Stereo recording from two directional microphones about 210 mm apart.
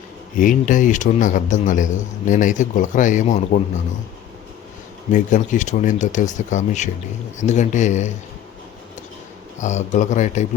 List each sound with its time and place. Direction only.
0.3 s a man's voice: 40° left (ahead or behind)
5.1 s a man's voice: 35° left (ahead or behind)
9.6 s a man's voice: 35° left (ahead or behind)